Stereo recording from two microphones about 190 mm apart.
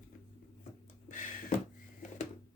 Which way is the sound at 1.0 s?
40° left (ahead or behind).